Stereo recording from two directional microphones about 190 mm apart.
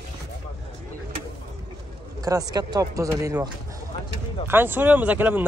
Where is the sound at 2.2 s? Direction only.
20° right (ahead or behind).